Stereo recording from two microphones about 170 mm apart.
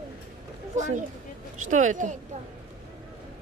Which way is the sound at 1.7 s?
45° right (ahead or behind).